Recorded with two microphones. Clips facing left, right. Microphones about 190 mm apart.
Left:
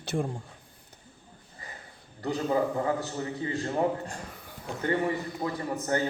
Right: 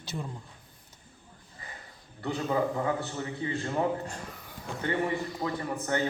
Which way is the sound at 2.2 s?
35° left (ahead or behind).